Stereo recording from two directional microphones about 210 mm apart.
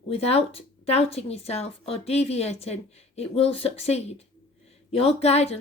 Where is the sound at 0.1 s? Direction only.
30° left (ahead or behind).